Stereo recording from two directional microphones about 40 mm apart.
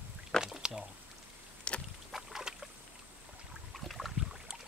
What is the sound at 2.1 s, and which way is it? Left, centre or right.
Boat, centre.